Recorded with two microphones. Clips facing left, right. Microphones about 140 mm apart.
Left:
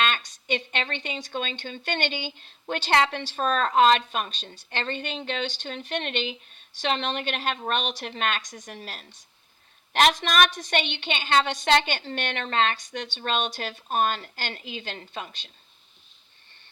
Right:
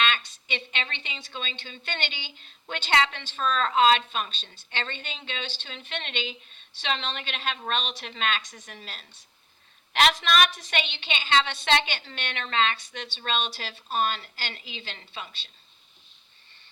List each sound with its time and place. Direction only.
0.3 s a woman's voice: 45° left (ahead or behind)